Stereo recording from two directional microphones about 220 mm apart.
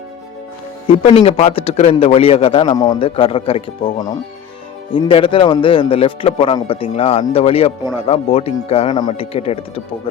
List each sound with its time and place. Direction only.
1.0 s a man's voice: 25° left (ahead or behind)